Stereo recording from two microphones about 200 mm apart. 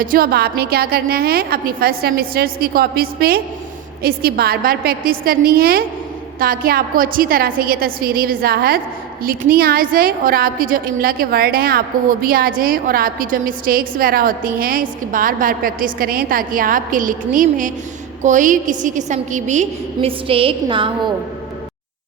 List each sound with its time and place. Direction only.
0.0 s a woman's voice: 45° right (ahead or behind); by 20.9 s 25° right (ahead or behind)